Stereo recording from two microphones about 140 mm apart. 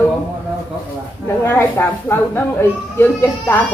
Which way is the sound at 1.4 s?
15° left (ahead or behind).